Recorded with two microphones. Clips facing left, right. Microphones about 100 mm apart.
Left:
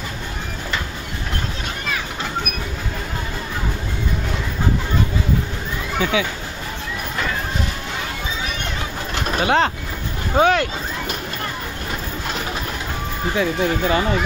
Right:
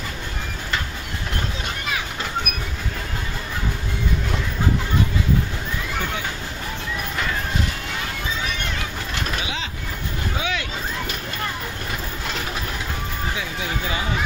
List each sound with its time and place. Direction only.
9.4 s speech: 55° left (ahead or behind)
13.4 s speech: 50° left (ahead or behind)